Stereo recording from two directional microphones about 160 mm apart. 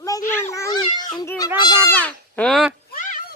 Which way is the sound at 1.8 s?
10° left (ahead or behind).